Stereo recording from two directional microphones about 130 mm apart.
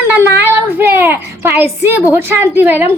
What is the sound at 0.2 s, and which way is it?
A woman's voice, 15° right (ahead or behind).